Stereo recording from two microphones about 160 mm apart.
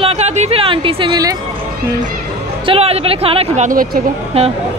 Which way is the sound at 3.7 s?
60° right (ahead or behind).